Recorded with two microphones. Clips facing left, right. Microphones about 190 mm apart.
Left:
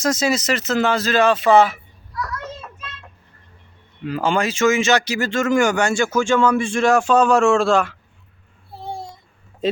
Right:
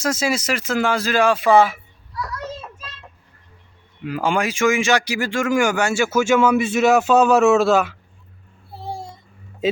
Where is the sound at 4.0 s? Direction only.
10° right (ahead or behind).